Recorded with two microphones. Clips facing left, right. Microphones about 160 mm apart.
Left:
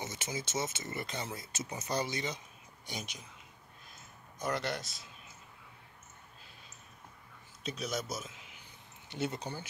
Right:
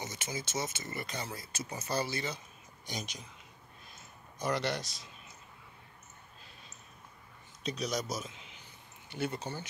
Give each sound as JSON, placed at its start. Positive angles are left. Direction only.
{"t": 0.0, "sound": "speech", "side_deg": 25}
{"t": 4.4, "sound": "speech", "side_deg": 0}
{"t": 7.6, "sound": "speech", "side_deg": 5}
{"t": 9.1, "sound": "speech", "side_deg": 20}